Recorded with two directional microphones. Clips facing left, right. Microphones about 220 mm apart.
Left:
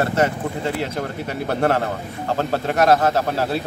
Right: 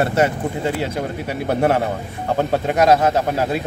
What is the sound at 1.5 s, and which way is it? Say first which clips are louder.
Speech: right 2 dB; 15° right (ahead or behind).